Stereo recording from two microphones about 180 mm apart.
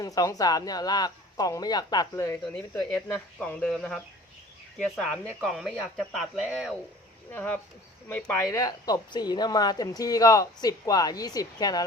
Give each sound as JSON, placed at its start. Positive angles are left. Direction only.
{"t": 0.0, "sound": "speech", "side_deg": 20}
{"t": 7.3, "sound": "speech", "side_deg": 10}